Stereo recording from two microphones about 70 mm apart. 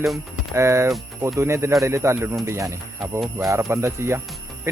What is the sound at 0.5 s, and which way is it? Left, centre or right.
Speech, right.